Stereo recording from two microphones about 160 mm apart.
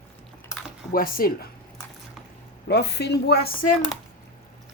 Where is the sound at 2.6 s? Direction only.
90° left.